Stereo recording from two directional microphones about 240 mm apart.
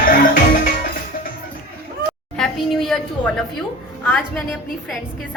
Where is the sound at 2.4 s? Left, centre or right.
Centre.